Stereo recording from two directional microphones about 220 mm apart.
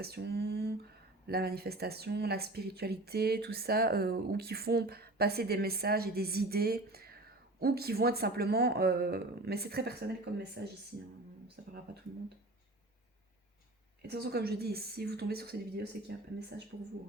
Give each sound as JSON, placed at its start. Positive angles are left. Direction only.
{"t": 0.0, "sound": "speech", "side_deg": -45}
{"t": 14.1, "sound": "speech", "side_deg": -45}